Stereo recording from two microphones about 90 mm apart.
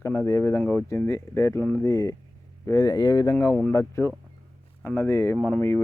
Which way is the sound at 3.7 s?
30° left (ahead or behind).